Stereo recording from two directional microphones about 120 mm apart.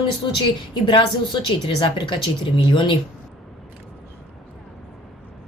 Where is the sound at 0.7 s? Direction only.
40° left (ahead or behind).